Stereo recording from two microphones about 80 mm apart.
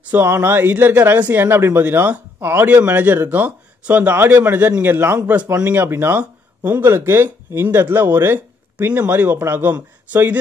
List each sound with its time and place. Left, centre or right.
0.1 s speech: right